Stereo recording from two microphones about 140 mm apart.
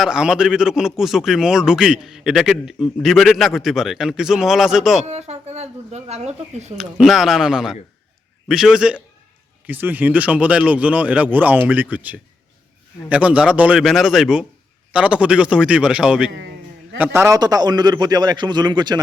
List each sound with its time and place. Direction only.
0.0 s a man's voice: 5° right (ahead or behind)
5.0 s speech: 50° right (ahead or behind)
6.7 s a man's voice: centre (ahead or behind)
17.0 s a man's voice: 20° right (ahead or behind)